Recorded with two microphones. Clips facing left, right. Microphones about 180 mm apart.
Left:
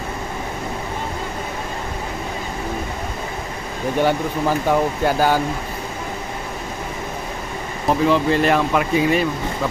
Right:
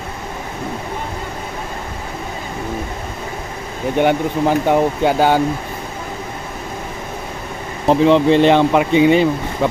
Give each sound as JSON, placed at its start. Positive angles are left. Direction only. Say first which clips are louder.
{"t": 4.0, "sound": "speech", "louder": "right 4 dB", "side_deg": -20}
{"t": 7.9, "sound": "speech", "louder": "right 5 dB", "side_deg": -25}